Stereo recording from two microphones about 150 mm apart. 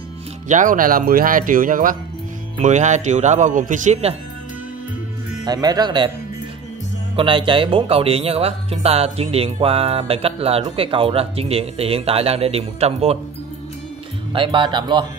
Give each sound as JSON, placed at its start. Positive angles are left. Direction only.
{"t": 0.5, "sound": "speech", "side_deg": -60}
{"t": 2.6, "sound": "speech", "side_deg": -50}
{"t": 5.4, "sound": "speech", "side_deg": -25}
{"t": 7.2, "sound": "speech", "side_deg": -35}
{"t": 14.3, "sound": "speech", "side_deg": -35}